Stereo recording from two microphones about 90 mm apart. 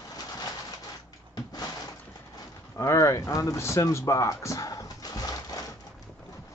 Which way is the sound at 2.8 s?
35° left (ahead or behind).